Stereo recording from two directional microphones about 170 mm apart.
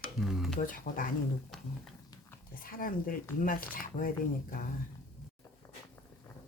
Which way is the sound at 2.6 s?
55° left (ahead or behind).